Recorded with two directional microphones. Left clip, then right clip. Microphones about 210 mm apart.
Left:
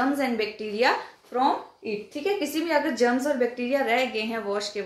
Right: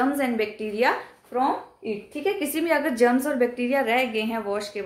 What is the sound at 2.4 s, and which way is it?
A woman's voice, 30° right (ahead or behind).